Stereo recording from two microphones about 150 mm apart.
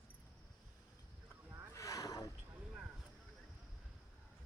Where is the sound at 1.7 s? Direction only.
20° left (ahead or behind).